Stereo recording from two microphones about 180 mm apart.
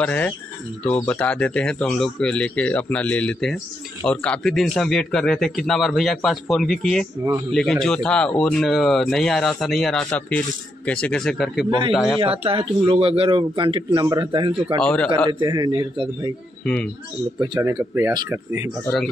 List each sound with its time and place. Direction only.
0.0 s speech: 10° left (ahead or behind)
12.2 s speech: 30° right (ahead or behind)
17.4 s speech: 20° right (ahead or behind)